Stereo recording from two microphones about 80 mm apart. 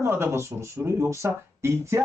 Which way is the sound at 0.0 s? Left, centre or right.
Right.